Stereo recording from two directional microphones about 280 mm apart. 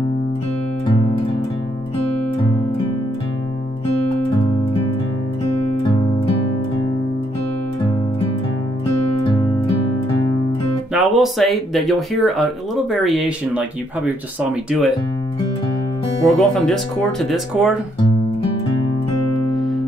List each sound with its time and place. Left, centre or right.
5.9 s music: centre
10.9 s speech: centre
16.3 s speech: centre